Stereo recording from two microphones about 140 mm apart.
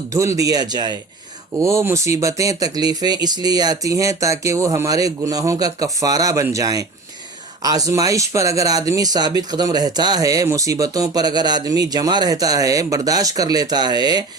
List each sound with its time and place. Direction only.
0.1 s speech: 20° right (ahead or behind)